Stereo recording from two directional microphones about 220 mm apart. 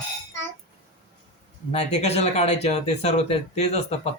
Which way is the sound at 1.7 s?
30° left (ahead or behind).